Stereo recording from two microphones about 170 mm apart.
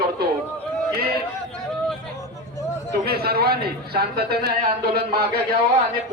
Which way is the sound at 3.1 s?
65° right (ahead or behind).